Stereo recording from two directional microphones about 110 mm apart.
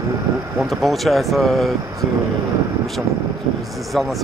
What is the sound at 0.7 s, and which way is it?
Speech, centre (ahead or behind).